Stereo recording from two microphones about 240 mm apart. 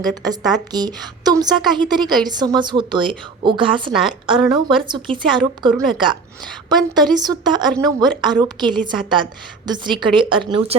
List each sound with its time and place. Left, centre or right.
0.0 s a woman's voice: centre